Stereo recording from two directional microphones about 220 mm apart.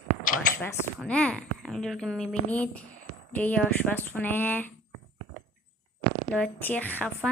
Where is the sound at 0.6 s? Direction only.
5° left (ahead or behind).